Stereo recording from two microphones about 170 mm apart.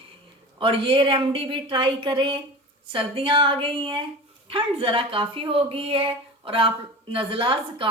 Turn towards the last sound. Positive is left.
turn(degrees=-30)  # may be behind; listen again after turning